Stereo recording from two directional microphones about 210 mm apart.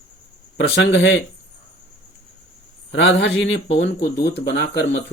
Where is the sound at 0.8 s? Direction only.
60° left (ahead or behind).